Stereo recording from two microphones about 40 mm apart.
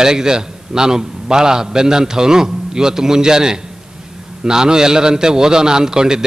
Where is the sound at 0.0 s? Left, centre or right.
Centre.